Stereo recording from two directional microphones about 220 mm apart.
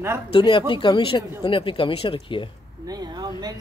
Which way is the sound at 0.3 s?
20° left (ahead or behind).